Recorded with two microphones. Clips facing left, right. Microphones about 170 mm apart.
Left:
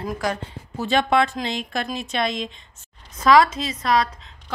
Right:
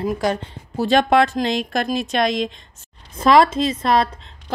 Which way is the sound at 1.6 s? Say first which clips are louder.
Right 6 dB; 80° right.